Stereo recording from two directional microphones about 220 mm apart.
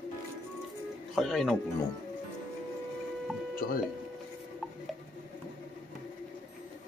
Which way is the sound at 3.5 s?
40° left (ahead or behind).